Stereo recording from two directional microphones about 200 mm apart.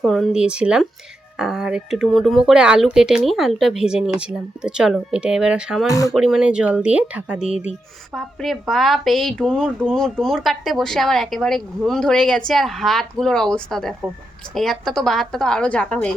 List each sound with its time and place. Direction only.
0.0 s a woman's voice: centre (ahead or behind)
5.9 s speech: 15° left (ahead or behind)
6.1 s a woman's voice: 5° right (ahead or behind)